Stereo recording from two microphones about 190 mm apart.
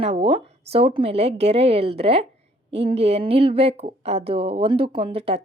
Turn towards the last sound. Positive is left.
turn(degrees=-30)  # may be behind; listen again after turning